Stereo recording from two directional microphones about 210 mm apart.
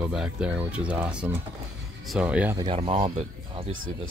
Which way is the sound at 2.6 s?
25° right (ahead or behind).